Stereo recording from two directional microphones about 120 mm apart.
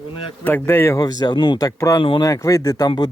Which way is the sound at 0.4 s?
15° left (ahead or behind).